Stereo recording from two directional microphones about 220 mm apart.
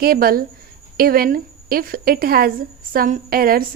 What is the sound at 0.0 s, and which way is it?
A woman's voice, 40° right (ahead or behind).